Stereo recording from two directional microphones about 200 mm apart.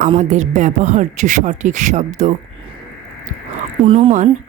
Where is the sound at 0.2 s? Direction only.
40° right (ahead or behind).